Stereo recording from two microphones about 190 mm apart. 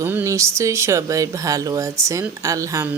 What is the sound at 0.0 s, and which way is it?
Speech, 10° right (ahead or behind).